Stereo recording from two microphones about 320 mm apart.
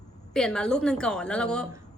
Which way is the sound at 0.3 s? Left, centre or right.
Centre.